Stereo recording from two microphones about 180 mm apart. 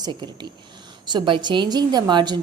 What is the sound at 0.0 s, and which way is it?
A woman's voice, 25° right (ahead or behind).